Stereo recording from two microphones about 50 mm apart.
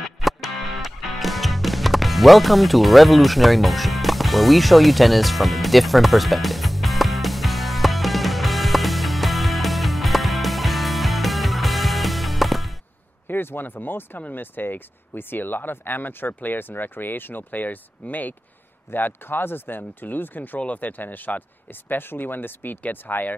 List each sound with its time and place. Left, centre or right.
0.2 s music: centre
13.3 s speech: left